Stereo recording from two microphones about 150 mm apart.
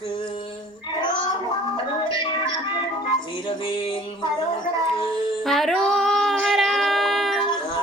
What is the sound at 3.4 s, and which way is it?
Music, 30° left (ahead or behind).